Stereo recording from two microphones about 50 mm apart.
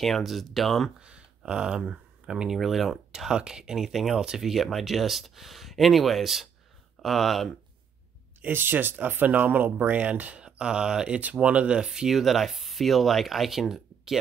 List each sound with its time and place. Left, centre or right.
0.0 s speech: centre
0.9 s speech: centre
2.5 s speech: centre
3.1 s speech: centre
8.4 s speech: right
10.4 s speech: centre